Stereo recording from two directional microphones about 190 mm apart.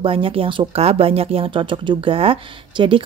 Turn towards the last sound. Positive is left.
turn(degrees=-25)  # may be behind; listen again after turning